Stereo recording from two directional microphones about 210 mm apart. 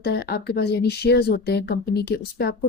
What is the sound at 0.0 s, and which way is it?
A woman's voice, 50° left (ahead or behind).